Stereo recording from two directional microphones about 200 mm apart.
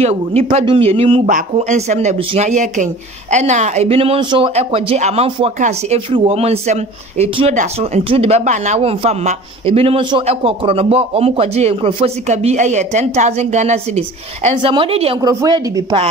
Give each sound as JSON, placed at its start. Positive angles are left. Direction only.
{"t": 0.0, "sound": "speech", "side_deg": -30}
{"t": 15.1, "sound": "speech", "side_deg": -20}